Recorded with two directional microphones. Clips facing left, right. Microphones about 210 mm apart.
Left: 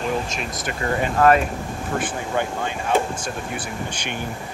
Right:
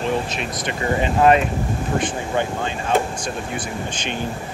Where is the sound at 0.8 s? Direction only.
15° right (ahead or behind).